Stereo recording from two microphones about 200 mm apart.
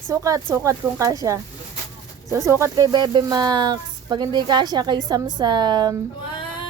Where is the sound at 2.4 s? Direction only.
15° right (ahead or behind).